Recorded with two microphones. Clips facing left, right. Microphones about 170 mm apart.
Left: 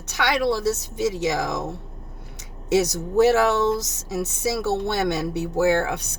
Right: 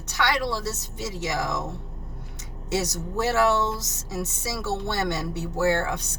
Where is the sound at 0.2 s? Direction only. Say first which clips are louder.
Left 4 dB; 15° left (ahead or behind).